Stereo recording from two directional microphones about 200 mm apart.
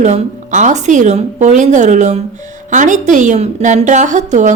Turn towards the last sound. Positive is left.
turn(degrees=-35)  # may be behind; listen again after turning